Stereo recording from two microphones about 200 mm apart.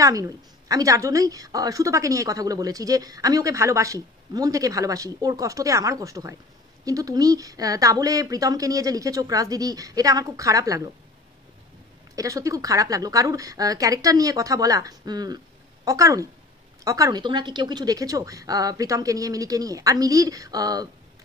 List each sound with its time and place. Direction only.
0.0 s a woman's voice: 15° right (ahead or behind)
12.2 s a woman's voice: 15° right (ahead or behind)